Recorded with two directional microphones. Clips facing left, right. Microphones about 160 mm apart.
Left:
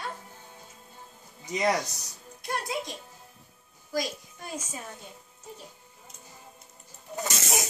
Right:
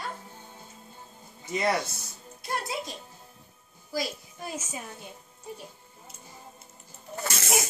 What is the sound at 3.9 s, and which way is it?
Speech, 5° right (ahead or behind).